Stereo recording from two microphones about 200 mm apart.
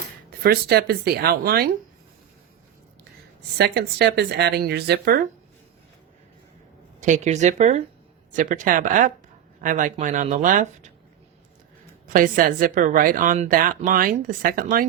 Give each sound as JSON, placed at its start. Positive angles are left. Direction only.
{"t": 0.3, "sound": "a woman's voice", "side_deg": -50}
{"t": 3.6, "sound": "speech", "side_deg": -55}
{"t": 7.0, "sound": "speech", "side_deg": -35}
{"t": 12.0, "sound": "a woman's voice", "side_deg": -45}